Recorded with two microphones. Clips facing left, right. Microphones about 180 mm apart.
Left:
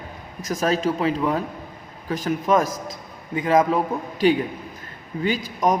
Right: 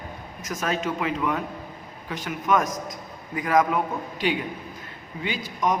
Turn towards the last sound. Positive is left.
turn(degrees=40)  # may be behind; listen again after turning